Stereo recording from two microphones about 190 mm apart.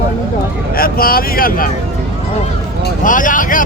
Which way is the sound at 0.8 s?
50° left (ahead or behind).